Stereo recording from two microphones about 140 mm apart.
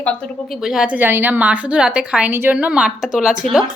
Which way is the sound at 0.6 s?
5° right (ahead or behind).